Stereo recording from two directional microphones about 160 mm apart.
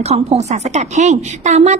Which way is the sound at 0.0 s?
40° right (ahead or behind).